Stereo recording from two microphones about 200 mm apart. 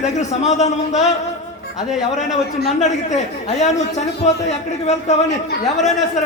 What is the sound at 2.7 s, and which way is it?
Speech, 35° left (ahead or behind).